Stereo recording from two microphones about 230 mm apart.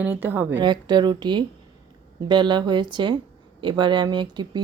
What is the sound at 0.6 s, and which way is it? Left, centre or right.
A woman's voice, centre.